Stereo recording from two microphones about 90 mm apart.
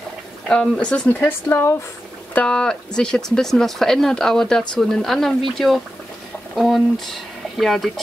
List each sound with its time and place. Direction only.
0.5 s speech: 10° left (ahead or behind)
2.3 s speech: 10° left (ahead or behind)